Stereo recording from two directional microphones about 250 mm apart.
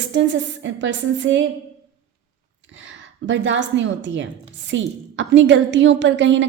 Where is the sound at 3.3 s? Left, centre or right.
Right.